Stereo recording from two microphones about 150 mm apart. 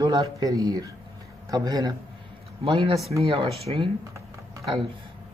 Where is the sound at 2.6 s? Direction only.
35° right (ahead or behind).